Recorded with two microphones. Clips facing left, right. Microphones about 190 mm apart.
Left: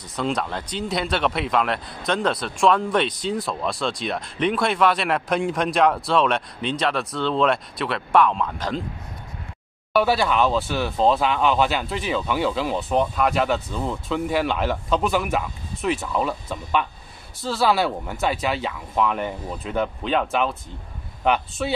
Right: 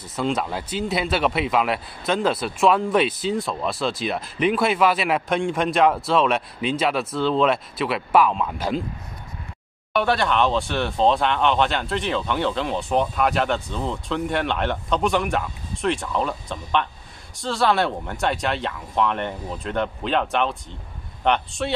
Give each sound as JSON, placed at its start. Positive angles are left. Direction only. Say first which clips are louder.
{"t": 0.1, "sound": "speech", "louder": "right 1 dB", "side_deg": -5}
{"t": 9.9, "sound": "speech", "louder": "left 1 dB", "side_deg": 5}